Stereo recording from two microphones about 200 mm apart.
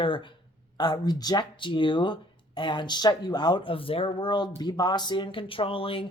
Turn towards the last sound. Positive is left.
turn(degrees=25)  # may be behind; listen again after turning